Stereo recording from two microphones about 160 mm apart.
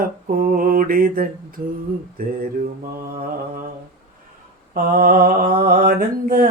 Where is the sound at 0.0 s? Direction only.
60° right (ahead or behind).